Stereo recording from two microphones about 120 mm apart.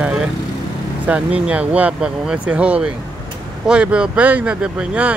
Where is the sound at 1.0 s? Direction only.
10° right (ahead or behind).